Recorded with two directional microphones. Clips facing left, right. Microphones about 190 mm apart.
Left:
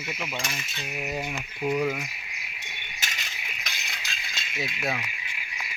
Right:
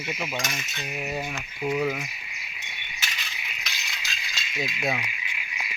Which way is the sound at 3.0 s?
45° left (ahead or behind).